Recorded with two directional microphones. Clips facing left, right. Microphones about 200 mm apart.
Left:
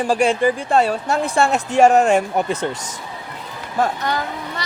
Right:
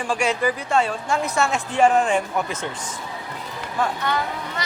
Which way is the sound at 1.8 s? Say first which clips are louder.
Left 4 dB; 45° left (ahead or behind).